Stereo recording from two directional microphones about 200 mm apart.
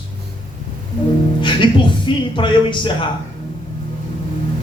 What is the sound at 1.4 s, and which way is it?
Speech, 25° left (ahead or behind).